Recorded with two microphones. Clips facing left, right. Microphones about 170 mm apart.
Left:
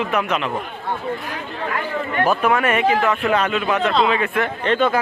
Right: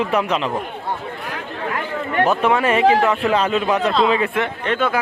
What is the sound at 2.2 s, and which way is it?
Speech, 25° right (ahead or behind).